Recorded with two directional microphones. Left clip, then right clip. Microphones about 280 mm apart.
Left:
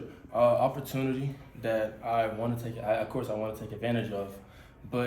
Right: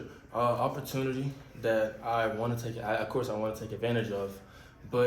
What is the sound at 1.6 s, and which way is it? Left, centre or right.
Speech, centre.